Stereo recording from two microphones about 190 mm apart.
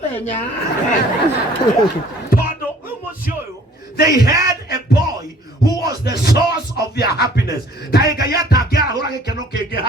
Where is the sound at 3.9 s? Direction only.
55° left (ahead or behind).